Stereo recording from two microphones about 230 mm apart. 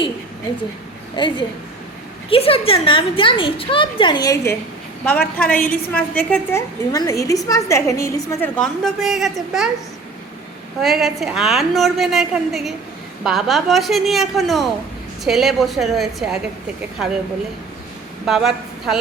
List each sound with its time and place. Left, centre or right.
1.1 s a woman's voice: centre
10.8 s a woman's voice: centre
18.3 s a woman's voice: centre